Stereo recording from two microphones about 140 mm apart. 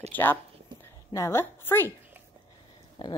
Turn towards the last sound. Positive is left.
turn(degrees=35)  # may be behind; listen again after turning